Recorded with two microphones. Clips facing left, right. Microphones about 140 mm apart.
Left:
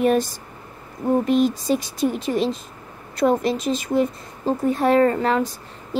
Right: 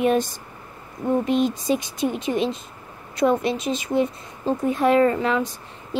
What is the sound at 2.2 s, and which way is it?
A woman's voice, 35° left (ahead or behind).